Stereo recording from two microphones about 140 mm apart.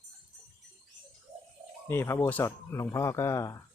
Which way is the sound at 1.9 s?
20° left (ahead or behind).